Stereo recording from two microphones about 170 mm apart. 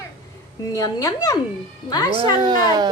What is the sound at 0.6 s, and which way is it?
A woman's voice, 20° left (ahead or behind).